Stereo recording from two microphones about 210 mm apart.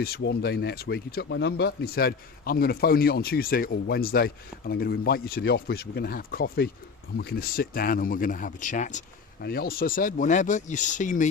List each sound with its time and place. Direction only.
0.0 s speech: 50° left (ahead or behind); by 9.0 s 35° left (ahead or behind)
9.4 s speech: 45° left (ahead or behind)